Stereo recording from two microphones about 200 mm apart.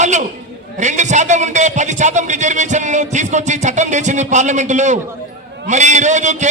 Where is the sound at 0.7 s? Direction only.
35° right (ahead or behind).